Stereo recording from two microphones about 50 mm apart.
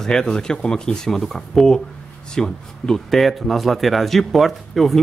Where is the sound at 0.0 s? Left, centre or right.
Centre.